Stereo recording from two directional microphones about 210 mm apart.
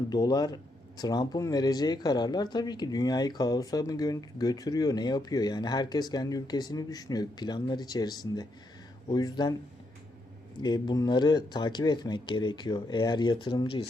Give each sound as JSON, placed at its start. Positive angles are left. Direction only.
{"t": 0.1, "sound": "speech", "side_deg": 20}
{"t": 10.6, "sound": "speech", "side_deg": 20}